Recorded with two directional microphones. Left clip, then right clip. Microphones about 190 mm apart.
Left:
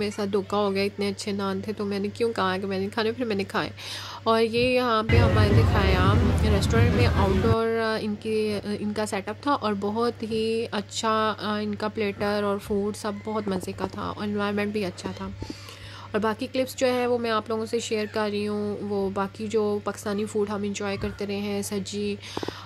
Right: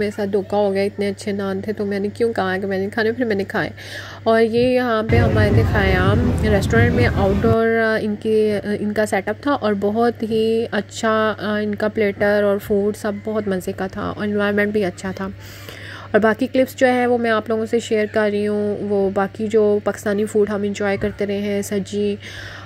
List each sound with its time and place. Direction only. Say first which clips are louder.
0.0 s speech: right 6 dB; 5° right (ahead or behind)